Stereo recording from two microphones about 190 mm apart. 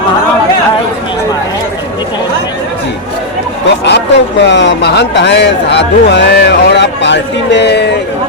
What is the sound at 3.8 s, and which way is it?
Speech, 65° left (ahead or behind).